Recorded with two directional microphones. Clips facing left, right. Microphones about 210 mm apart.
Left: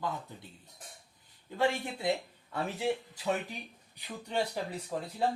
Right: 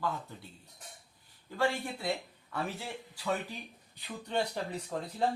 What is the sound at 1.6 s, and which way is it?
Speech, 20° left (ahead or behind).